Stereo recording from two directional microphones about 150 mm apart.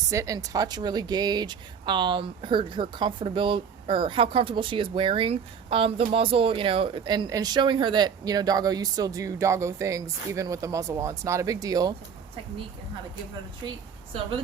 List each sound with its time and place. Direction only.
0.1 s speech: 20° right (ahead or behind)
13.7 s a woman's voice: 35° right (ahead or behind)